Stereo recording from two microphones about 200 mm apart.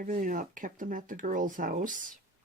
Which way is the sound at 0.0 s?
40° right (ahead or behind).